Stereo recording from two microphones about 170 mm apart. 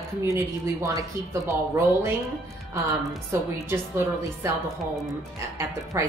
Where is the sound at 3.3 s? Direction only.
15° right (ahead or behind).